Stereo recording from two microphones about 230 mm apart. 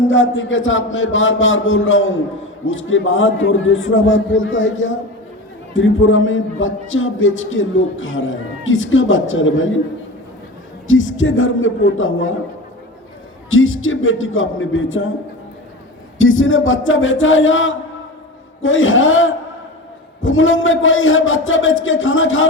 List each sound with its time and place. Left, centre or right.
0.1 s a man's voice: left
10.8 s a man's voice: left
13.5 s a man's voice: left
16.1 s a man's voice: left